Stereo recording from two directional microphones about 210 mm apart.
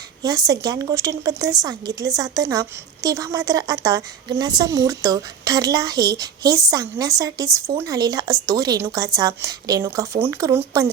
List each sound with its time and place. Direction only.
0.2 s a woman's voice: 15° right (ahead or behind)